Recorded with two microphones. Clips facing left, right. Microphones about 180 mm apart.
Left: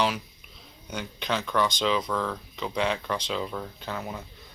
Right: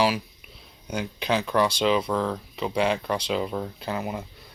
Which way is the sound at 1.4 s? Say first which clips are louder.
Right 2 dB; 35° right (ahead or behind).